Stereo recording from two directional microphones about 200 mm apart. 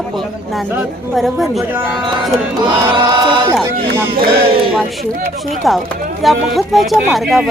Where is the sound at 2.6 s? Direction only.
25° right (ahead or behind).